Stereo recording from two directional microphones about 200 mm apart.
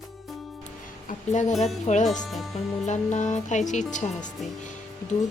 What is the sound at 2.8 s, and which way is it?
Speech, 35° left (ahead or behind).